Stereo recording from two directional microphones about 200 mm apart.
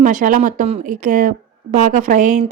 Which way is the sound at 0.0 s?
40° right (ahead or behind).